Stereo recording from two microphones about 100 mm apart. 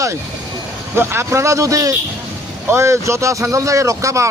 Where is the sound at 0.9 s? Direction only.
25° right (ahead or behind).